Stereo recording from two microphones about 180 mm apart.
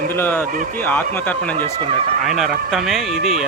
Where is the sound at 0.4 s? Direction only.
50° right (ahead or behind).